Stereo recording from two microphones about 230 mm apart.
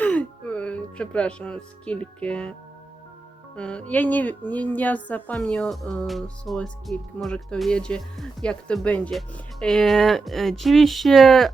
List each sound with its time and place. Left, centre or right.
0.0 s speech: centre